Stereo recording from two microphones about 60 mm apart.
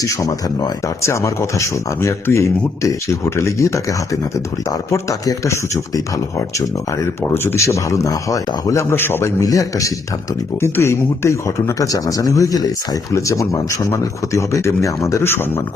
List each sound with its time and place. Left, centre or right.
0.0 s speech: left
1.0 s speech: left
5.5 s speech: left
7.6 s speech: left
9.0 s a man's voice: left
9.2 s a man's voice: left
10.6 s speech: left
11.8 s speech: left
13.1 s speech: left
15.2 s a man's voice: left